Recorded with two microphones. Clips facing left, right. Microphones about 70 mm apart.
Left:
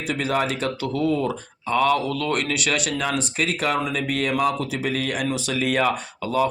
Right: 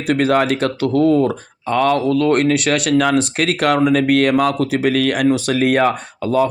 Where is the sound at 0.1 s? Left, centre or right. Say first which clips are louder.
Right 9 dB; right.